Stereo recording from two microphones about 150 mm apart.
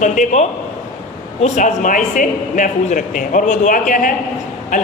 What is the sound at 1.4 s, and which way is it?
A man's voice, 55° left (ahead or behind).